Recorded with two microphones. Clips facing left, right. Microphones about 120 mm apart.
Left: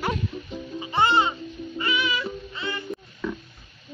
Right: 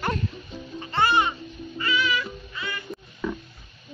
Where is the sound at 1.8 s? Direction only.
25° left (ahead or behind).